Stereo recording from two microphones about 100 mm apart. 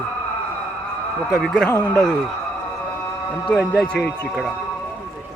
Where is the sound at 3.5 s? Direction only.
10° left (ahead or behind).